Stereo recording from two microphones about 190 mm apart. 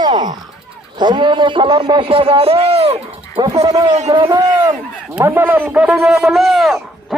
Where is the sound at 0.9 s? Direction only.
25° right (ahead or behind); by 7.1 s centre (ahead or behind).